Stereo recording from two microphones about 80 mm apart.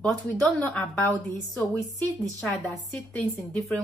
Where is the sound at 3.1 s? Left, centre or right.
Centre.